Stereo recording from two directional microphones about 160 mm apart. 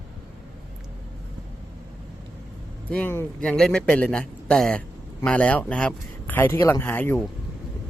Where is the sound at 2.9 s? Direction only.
10° left (ahead or behind).